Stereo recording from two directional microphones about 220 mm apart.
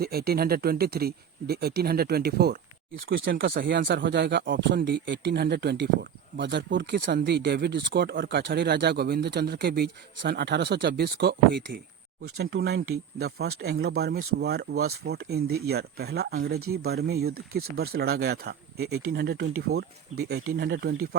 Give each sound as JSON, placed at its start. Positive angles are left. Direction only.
{"t": 0.0, "sound": "speech", "side_deg": -45}
{"t": 3.2, "sound": "speech", "side_deg": -60}